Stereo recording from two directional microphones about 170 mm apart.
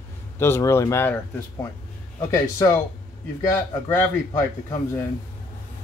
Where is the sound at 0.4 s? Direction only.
15° left (ahead or behind).